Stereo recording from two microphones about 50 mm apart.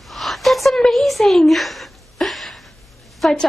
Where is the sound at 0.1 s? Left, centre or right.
Centre.